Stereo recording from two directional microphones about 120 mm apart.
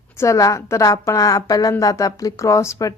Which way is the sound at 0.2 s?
25° left (ahead or behind).